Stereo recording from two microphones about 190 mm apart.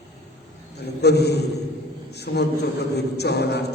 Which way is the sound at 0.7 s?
60° left (ahead or behind).